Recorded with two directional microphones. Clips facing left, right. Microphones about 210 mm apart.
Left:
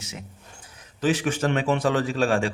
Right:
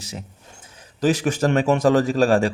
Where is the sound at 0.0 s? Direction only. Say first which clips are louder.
Right 4 dB; 35° right (ahead or behind).